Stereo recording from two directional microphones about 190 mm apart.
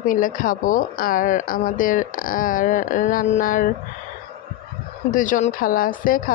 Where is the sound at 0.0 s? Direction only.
45° left (ahead or behind).